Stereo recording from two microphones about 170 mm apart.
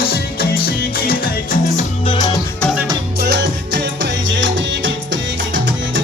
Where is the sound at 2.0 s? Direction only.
25° left (ahead or behind).